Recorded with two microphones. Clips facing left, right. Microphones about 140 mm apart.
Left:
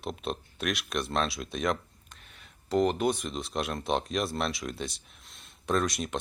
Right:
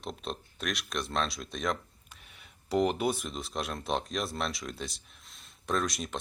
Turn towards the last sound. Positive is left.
turn(degrees=0)  # may be behind; listen again after turning